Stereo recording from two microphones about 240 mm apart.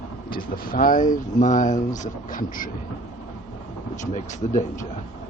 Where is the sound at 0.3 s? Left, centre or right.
Left.